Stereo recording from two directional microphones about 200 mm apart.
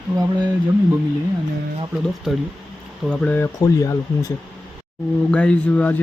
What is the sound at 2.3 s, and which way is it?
Speech, centre (ahead or behind).